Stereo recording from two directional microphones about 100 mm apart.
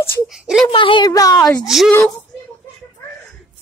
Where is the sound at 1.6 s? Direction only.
5° right (ahead or behind).